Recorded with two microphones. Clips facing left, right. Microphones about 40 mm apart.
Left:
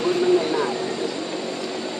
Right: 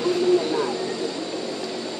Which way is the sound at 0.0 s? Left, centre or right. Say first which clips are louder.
Left 1 dB; left.